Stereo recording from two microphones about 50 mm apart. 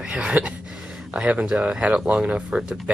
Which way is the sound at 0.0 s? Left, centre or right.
Centre.